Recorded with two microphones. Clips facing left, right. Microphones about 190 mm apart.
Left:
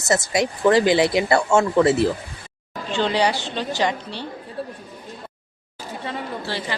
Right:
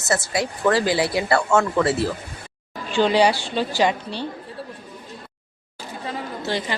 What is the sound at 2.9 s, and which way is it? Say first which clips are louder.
Speech: right 3 dB; 10° right (ahead or behind).